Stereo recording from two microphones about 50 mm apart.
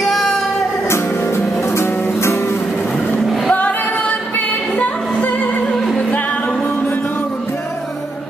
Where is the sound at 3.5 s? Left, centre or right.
Left.